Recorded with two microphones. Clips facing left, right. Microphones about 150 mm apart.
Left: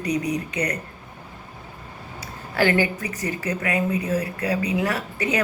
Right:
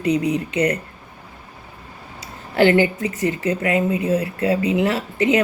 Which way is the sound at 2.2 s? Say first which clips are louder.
Right 6 dB; 25° right (ahead or behind).